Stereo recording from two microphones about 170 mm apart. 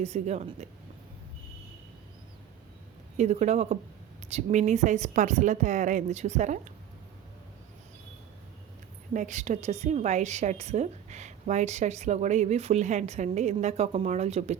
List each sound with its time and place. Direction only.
0.0 s speech: 40° right (ahead or behind)
3.2 s a woman's voice: 40° right (ahead or behind)
9.1 s a woman's voice: 45° right (ahead or behind)